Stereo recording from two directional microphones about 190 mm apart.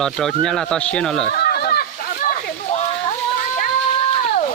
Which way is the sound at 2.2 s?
45° left (ahead or behind).